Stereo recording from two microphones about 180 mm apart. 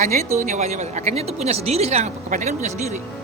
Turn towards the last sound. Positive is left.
turn(degrees=-40)  # may be behind; listen again after turning